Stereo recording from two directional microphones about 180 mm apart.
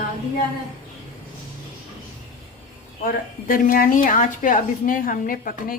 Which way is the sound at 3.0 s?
50° left (ahead or behind).